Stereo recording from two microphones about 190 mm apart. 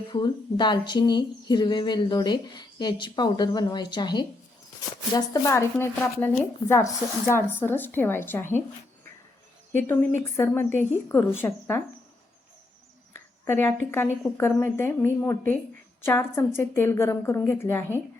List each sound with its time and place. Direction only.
0.1 s a woman's voice: 25° left (ahead or behind)
9.7 s a woman's voice: 10° left (ahead or behind)
13.4 s a woman's voice: 10° left (ahead or behind)